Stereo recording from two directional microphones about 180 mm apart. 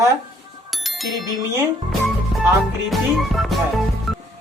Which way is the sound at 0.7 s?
Centre (ahead or behind).